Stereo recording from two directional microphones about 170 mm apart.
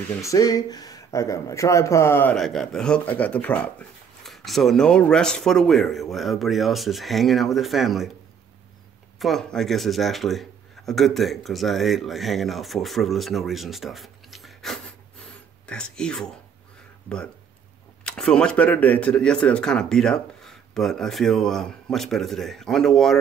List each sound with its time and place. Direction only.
0.2 s speech: 20° left (ahead or behind)
2.3 s speech: centre (ahead or behind)
9.2 s speech: centre (ahead or behind)
18.0 s speech: 5° left (ahead or behind)